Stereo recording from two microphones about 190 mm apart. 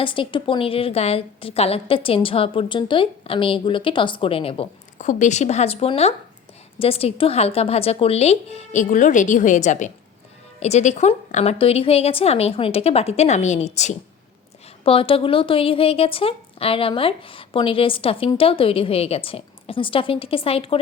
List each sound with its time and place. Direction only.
0.0 s a woman's voice: 25° left (ahead or behind)